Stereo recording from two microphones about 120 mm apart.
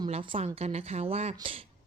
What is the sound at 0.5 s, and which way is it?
Speech, 60° right (ahead or behind).